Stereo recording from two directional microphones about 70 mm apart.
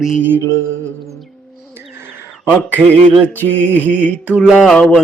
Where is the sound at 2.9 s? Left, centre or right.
Left.